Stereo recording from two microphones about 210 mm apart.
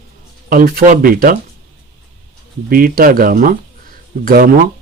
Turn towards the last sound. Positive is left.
turn(degrees=-40)  # may be behind; listen again after turning